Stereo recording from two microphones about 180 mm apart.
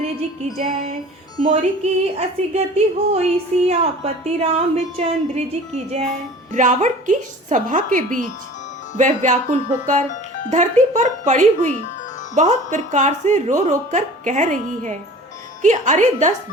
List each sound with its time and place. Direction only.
1.4 s a woman's voice: 35° right (ahead or behind)